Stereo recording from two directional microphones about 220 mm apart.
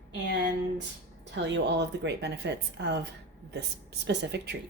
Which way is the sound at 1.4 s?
55° right (ahead or behind).